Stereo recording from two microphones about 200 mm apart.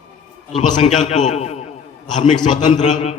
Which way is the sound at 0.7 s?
35° left (ahead or behind).